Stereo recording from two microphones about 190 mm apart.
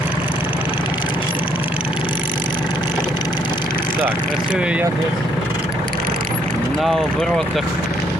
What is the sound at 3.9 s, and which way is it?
Vehicle, 10° right (ahead or behind).